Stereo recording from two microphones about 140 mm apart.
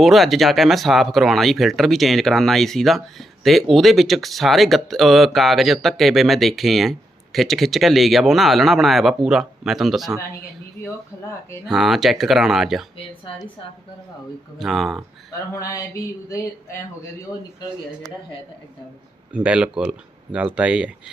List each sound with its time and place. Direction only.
0.0 s speech: centre (ahead or behind)
11.3 s a sound: 20° left (ahead or behind)
11.6 s speech: centre (ahead or behind)
14.6 s speech: centre (ahead or behind)
15.5 s a sound: 20° left (ahead or behind)
19.3 s speech: 10° right (ahead or behind)